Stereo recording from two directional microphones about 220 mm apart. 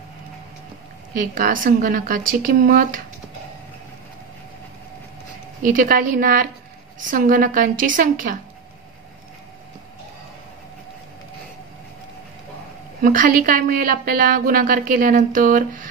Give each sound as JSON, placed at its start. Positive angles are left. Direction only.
{"t": 1.1, "sound": "a woman's voice", "side_deg": -40}
{"t": 5.6, "sound": "a woman's voice", "side_deg": -40}
{"t": 13.0, "sound": "a woman's voice", "side_deg": -40}